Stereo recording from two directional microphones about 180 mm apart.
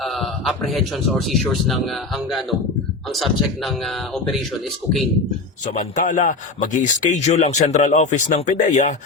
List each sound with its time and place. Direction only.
0.0 s speech: centre (ahead or behind)
5.6 s a man's voice: 45° left (ahead or behind)